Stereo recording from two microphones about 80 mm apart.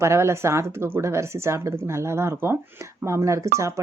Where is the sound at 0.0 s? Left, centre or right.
Right.